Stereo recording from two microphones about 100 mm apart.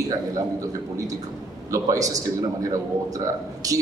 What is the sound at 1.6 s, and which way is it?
A man's voice, 35° right (ahead or behind).